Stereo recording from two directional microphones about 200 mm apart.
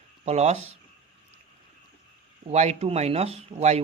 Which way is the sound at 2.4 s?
30° right (ahead or behind).